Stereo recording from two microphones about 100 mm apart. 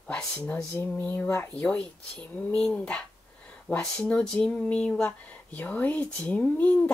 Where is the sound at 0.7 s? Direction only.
20° left (ahead or behind).